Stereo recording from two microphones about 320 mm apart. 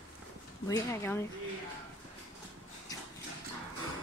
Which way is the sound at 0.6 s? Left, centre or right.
Centre.